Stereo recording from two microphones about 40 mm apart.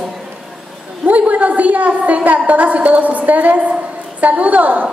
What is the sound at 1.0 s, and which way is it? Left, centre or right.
A woman's voice, right.